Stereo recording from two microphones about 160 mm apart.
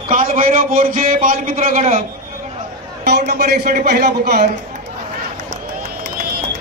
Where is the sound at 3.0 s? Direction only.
90° right.